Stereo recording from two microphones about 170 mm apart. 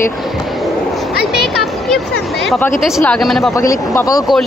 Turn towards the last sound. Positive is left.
turn(degrees=20)  # may be behind; listen again after turning